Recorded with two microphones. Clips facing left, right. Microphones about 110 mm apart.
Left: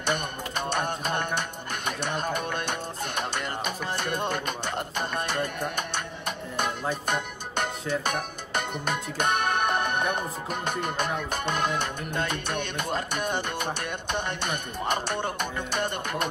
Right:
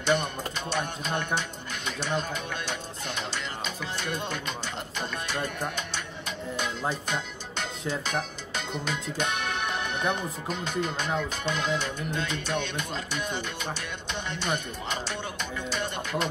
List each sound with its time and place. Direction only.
0.0 s speech: 55° left (ahead or behind)